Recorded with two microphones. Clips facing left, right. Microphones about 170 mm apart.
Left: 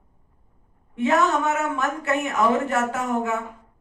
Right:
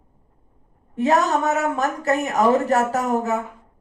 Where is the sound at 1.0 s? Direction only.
40° right (ahead or behind).